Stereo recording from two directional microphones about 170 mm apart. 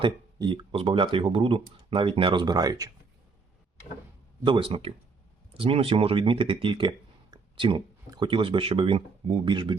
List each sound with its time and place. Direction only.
0.0 s speech: 30° right (ahead or behind)
4.4 s speech: 30° right (ahead or behind)